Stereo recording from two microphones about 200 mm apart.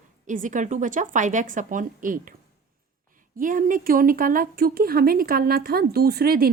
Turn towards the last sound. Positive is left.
turn(degrees=-50)  # may be behind; listen again after turning